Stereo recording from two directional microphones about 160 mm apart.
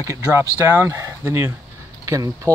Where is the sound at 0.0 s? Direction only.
20° right (ahead or behind).